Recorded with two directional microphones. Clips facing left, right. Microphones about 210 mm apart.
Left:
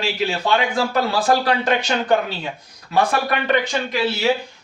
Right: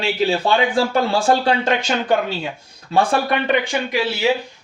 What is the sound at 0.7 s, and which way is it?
Speech, 30° right (ahead or behind).